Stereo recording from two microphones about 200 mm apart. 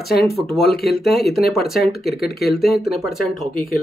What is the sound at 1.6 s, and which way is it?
Speech, 50° left (ahead or behind).